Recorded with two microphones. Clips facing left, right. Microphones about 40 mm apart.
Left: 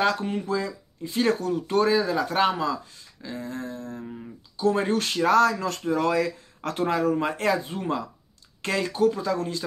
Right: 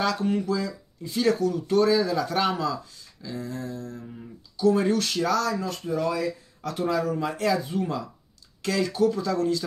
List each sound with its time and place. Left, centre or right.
0.0 s speech: left